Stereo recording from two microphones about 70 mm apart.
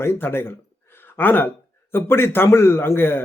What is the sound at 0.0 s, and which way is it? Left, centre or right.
A man's voice, left.